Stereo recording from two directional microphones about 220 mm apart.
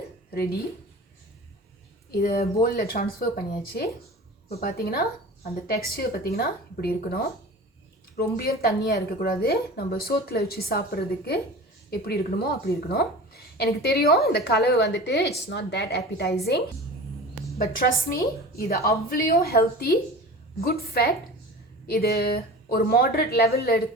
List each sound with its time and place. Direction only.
2.0 s a woman's voice: 45° left (ahead or behind)